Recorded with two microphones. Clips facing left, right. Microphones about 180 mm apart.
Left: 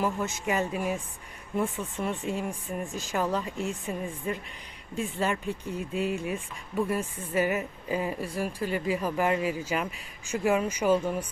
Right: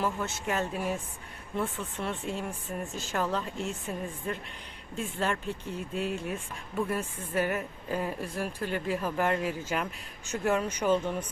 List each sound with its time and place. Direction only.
0.0 s speech: 10° left (ahead or behind)